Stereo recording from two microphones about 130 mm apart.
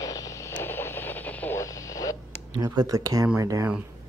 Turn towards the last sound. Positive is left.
turn(degrees=-25)  # may be behind; listen again after turning